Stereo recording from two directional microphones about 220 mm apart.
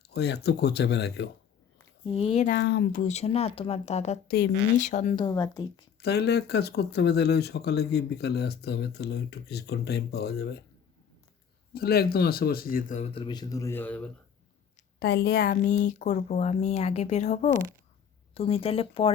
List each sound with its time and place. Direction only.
0.1 s speech: 50° left (ahead or behind)
2.1 s speech: 30° left (ahead or behind)
2.5 s speech: 50° left (ahead or behind)
3.0 s speech: 30° left (ahead or behind)
5.1 s speech: 15° left (ahead or behind)
6.0 s speech: 50° left (ahead or behind)
11.7 s speech: 45° left (ahead or behind); by 14.1 s 10° left (ahead or behind)
14.9 s speech: 50° left (ahead or behind); by 19.1 s 25° left (ahead or behind)